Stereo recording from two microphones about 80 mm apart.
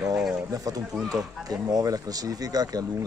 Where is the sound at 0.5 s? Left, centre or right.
Right.